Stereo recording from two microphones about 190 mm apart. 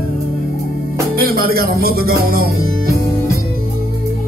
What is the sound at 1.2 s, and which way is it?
Music, 50° right (ahead or behind).